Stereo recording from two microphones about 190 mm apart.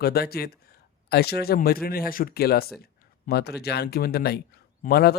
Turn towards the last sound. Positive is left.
turn(degrees=55)  # may be behind; listen again after turning